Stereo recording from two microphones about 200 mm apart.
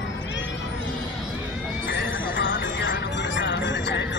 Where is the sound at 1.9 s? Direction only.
60° left (ahead or behind).